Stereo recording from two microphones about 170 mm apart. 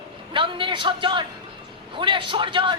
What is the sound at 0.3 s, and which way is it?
Speech, 30° right (ahead or behind).